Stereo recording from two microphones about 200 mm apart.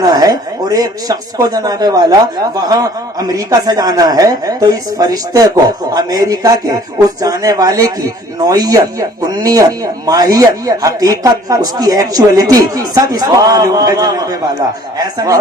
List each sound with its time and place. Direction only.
0.1 s speech: 20° right (ahead or behind)